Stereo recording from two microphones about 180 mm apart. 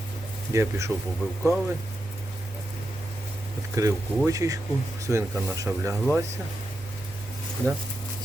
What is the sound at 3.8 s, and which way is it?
Speech, 15° right (ahead or behind).